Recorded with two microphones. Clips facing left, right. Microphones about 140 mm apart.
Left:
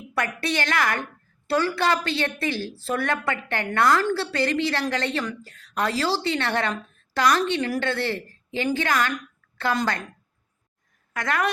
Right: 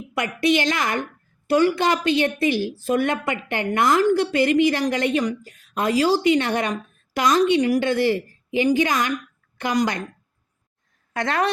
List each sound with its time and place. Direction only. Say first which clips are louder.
0.1 s a woman's voice: right 6 dB; 15° right (ahead or behind)
11.1 s a woman's voice: right 3 dB; 25° right (ahead or behind)